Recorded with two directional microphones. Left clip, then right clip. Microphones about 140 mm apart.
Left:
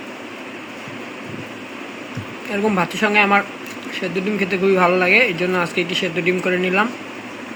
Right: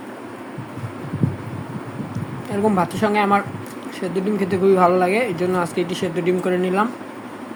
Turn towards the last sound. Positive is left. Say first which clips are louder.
# left 2 dB
turn(degrees=-15)  # may be behind; listen again after turning